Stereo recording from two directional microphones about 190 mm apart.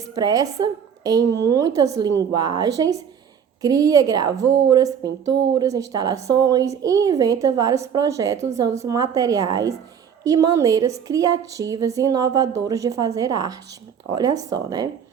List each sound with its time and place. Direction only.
0.0 s a woman's voice: 20° right (ahead or behind)